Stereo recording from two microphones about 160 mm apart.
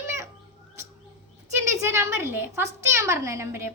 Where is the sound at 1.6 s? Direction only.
15° right (ahead or behind).